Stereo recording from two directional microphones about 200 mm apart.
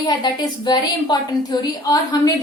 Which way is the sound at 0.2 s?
20° left (ahead or behind).